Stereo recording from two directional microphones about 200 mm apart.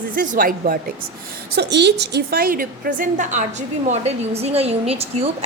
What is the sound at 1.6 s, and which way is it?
A woman's voice, 60° right (ahead or behind).